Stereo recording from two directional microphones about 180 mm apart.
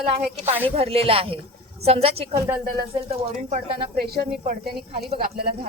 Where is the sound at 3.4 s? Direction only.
40° right (ahead or behind).